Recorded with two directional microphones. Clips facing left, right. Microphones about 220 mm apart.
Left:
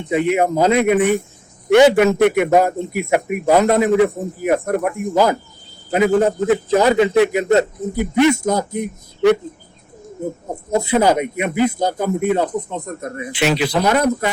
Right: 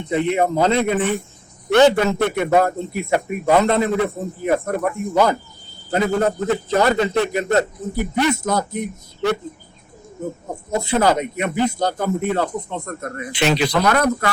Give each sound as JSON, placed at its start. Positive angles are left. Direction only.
{"t": 0.1, "sound": "a man's voice", "side_deg": 15}
{"t": 10.9, "sound": "a man's voice", "side_deg": 10}